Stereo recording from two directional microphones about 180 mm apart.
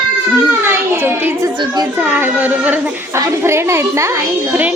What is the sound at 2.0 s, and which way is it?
Speech, 10° right (ahead or behind).